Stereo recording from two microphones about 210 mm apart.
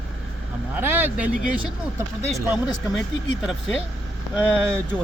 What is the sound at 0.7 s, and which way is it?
Speech, 10° right (ahead or behind).